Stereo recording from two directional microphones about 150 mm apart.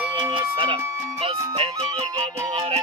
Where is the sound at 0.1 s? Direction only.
35° right (ahead or behind).